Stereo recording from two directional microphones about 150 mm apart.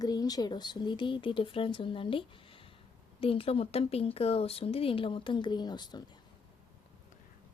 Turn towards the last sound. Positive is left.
turn(degrees=30)  # may be behind; listen again after turning